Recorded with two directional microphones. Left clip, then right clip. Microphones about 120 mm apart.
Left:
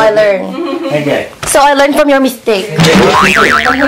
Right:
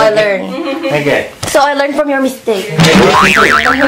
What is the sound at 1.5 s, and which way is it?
A woman's voice, 30° left (ahead or behind).